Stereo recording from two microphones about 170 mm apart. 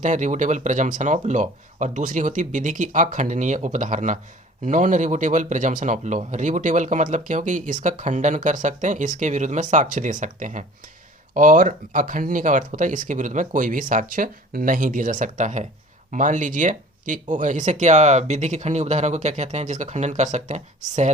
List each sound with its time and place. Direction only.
0.0 s speech: 45° right (ahead or behind)